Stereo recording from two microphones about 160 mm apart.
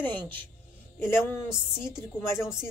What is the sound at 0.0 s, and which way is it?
A woman's voice, 10° left (ahead or behind).